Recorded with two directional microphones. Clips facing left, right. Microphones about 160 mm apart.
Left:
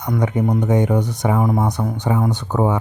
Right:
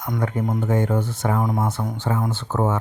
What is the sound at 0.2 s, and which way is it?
Speech, 20° left (ahead or behind).